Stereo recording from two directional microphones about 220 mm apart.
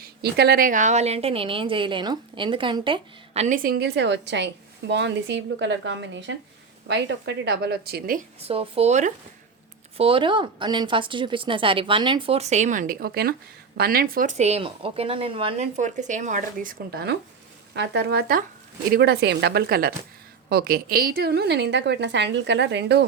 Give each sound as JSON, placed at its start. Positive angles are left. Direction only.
{"t": 0.2, "sound": "a woman's voice", "side_deg": -45}